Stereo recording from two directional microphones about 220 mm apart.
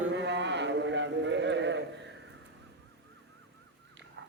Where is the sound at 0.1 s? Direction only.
55° right (ahead or behind).